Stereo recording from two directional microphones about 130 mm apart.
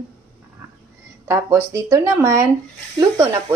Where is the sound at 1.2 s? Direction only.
20° right (ahead or behind).